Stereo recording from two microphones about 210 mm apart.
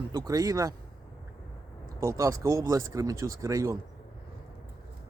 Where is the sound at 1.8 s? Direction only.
15° right (ahead or behind).